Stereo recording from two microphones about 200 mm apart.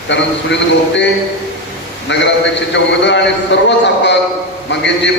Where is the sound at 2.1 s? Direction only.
60° left (ahead or behind).